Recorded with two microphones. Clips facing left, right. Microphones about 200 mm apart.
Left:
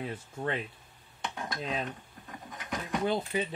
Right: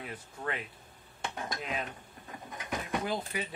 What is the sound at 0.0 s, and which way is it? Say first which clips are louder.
Speech: left 4 dB; 25° left (ahead or behind).